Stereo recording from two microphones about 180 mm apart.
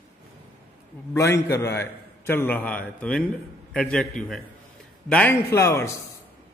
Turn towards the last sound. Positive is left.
turn(degrees=15)  # may be behind; listen again after turning